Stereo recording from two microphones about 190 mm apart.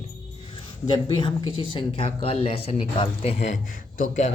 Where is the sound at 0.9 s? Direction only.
20° left (ahead or behind).